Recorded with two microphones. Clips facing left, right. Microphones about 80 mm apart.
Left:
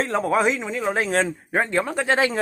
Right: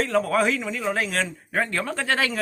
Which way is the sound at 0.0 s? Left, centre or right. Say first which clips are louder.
Left 1 dB; left.